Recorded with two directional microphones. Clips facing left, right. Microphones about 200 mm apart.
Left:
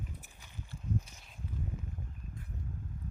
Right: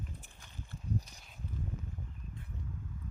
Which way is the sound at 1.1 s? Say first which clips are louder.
Even; centre (ahead or behind).